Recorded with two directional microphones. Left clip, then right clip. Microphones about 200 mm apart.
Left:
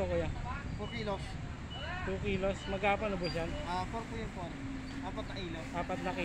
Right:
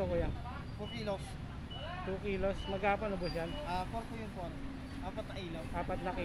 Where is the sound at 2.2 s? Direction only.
Centre (ahead or behind).